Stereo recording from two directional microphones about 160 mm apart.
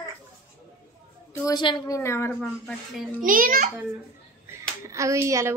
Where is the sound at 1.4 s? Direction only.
25° left (ahead or behind).